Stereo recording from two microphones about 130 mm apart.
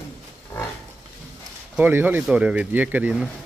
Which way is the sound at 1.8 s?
15° right (ahead or behind).